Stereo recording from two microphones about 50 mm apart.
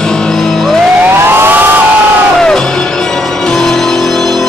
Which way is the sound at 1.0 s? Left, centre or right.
Right.